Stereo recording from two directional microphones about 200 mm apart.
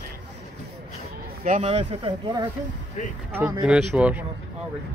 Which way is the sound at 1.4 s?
35° right (ahead or behind).